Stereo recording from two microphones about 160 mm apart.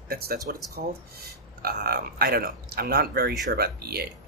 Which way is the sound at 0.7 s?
75° right (ahead or behind).